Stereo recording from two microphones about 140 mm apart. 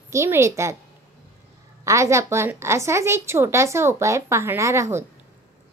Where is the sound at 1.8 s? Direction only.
20° right (ahead or behind).